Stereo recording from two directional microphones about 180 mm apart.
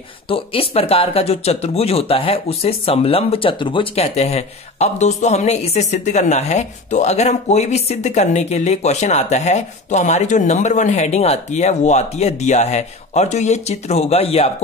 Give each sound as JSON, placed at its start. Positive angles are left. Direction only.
{"t": 0.3, "sound": "speech", "side_deg": 30}